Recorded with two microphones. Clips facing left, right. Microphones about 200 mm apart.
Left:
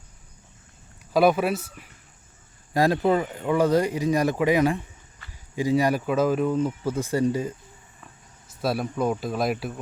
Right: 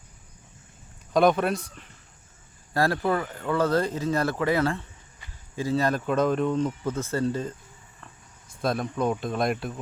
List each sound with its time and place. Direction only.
1.1 s speech: 5° left (ahead or behind)
2.7 s speech: 15° left (ahead or behind)
5.2 s a sound: 15° right (ahead or behind)
5.5 s speech: 15° left (ahead or behind)